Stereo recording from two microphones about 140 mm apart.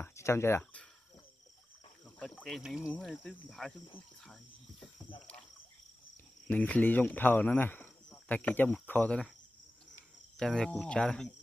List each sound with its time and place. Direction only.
0.0 s speech: 20° left (ahead or behind)
2.1 s speech: 5° left (ahead or behind)
2.9 s cricket: 10° left (ahead or behind)
6.4 s speech: 10° left (ahead or behind)
10.3 s cricket: 5° left (ahead or behind)